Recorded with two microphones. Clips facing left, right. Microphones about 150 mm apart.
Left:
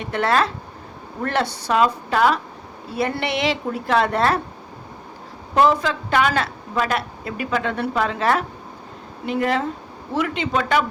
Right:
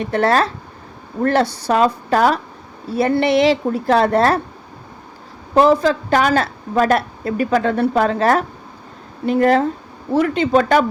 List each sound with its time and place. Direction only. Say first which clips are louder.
0.0 s a woman's voice: right 4 dB; 35° right (ahead or behind)
5.5 s a woman's voice: right 5 dB; 35° right (ahead or behind)